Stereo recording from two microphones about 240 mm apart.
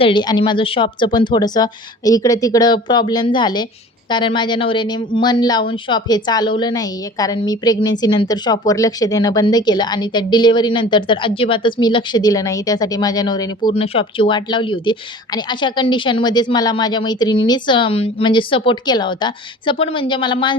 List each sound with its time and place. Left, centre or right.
0.0 s speech: centre